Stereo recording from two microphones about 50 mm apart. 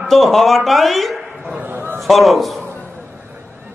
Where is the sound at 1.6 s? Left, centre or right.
Right.